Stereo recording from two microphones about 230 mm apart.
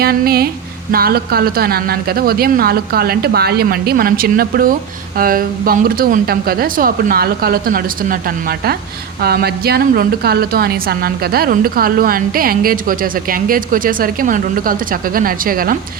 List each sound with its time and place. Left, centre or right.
0.0 s a woman's voice: right